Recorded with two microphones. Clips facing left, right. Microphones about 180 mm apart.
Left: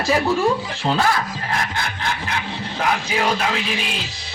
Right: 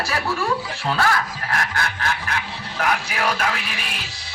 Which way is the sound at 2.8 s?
20° left (ahead or behind).